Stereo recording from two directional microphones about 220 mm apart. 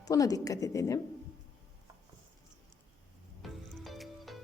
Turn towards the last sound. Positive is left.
turn(degrees=0)  # may be behind; listen again after turning